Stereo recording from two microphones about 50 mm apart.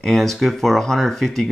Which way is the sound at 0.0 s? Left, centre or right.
Centre.